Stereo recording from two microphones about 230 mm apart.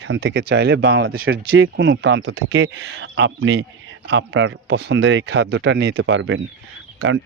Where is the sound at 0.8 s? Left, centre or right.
Right.